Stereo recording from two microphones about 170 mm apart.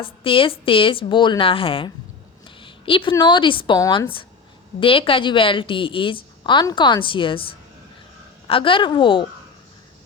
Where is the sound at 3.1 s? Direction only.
30° left (ahead or behind).